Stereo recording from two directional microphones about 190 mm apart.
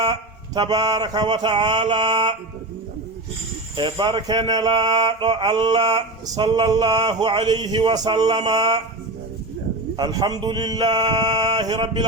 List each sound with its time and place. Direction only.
0.0 s speech: 25° right (ahead or behind)
3.8 s speech: 25° right (ahead or behind)
10.0 s speech: 20° right (ahead or behind)